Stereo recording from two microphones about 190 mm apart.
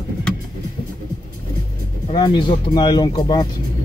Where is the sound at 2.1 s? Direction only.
25° left (ahead or behind).